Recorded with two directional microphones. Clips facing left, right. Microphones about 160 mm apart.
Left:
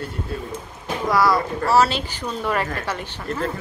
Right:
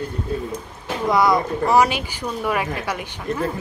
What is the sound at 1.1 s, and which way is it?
Speech, 20° right (ahead or behind).